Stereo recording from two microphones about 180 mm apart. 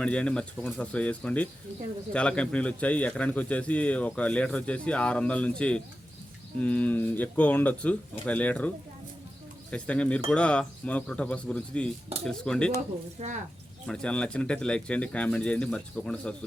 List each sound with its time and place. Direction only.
0.0 s a man's voice: 5° left (ahead or behind)
13.1 s speech: 40° right (ahead or behind)
13.8 s speech: 5° left (ahead or behind)